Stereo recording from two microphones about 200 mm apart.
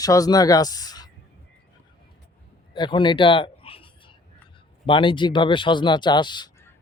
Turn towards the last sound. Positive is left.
turn(degrees=20)  # may be behind; listen again after turning